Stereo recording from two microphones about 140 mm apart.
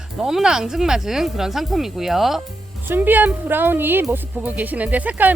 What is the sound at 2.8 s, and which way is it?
Speech, 15° right (ahead or behind).